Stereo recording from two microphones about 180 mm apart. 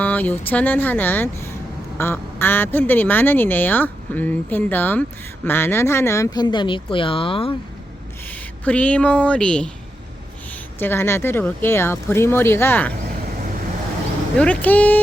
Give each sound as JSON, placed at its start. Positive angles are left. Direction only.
{"t": 0.0, "sound": "speech", "side_deg": 10}
{"t": 8.6, "sound": "speech", "side_deg": 5}
{"t": 10.8, "sound": "speech", "side_deg": 10}
{"t": 14.3, "sound": "speech", "side_deg": 5}